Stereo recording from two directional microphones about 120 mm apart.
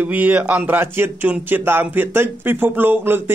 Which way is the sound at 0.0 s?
15° right (ahead or behind).